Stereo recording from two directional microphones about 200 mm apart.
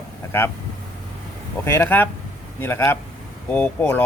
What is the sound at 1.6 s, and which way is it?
Speech, 10° left (ahead or behind).